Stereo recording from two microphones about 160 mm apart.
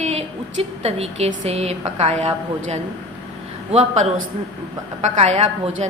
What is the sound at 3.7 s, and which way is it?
A woman's voice, 40° right (ahead or behind).